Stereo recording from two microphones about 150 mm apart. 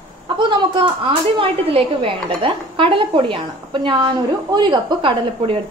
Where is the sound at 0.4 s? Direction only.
30° right (ahead or behind).